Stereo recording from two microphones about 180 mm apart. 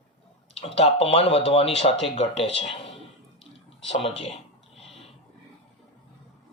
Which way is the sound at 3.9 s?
35° left (ahead or behind).